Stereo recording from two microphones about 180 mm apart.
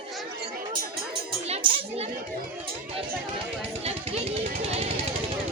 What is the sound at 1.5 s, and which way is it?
Children playing, 35° right (ahead or behind).